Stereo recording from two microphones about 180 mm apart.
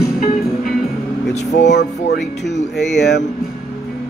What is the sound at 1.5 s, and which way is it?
Speech, 70° left (ahead or behind).